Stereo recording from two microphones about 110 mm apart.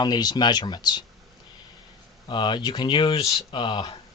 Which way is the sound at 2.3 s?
45° left (ahead or behind).